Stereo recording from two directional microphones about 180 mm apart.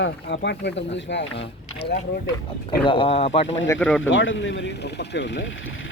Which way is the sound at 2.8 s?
30° left (ahead or behind).